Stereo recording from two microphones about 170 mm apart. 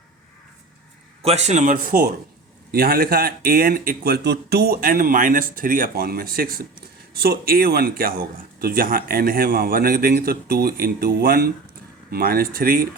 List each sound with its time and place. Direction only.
1.2 s a man's voice: 40° right (ahead or behind); by 12.9 s 60° right (ahead or behind)